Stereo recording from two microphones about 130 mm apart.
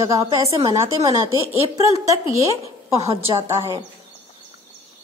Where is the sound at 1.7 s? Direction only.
25° right (ahead or behind).